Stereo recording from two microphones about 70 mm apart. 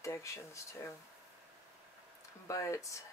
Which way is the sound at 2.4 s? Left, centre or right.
Left.